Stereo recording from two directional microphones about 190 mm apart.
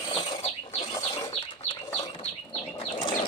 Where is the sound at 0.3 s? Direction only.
30° left (ahead or behind).